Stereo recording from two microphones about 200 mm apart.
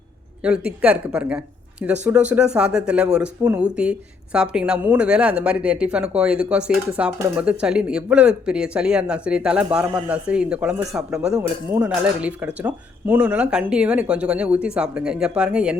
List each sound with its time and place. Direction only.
0.4 s speech: 5° right (ahead or behind)